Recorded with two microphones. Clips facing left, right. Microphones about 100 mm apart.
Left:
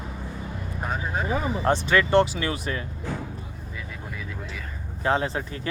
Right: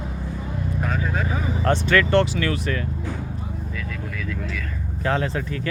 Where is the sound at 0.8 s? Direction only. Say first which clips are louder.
Right 1 dB; 25° left (ahead or behind).